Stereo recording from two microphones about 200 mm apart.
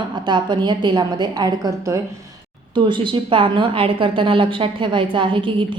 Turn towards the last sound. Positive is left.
turn(degrees=-25)  # may be behind; listen again after turning